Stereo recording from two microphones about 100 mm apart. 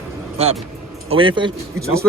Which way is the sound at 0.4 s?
90° right.